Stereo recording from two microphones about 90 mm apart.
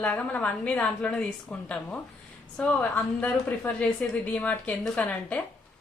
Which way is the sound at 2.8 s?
15° left (ahead or behind).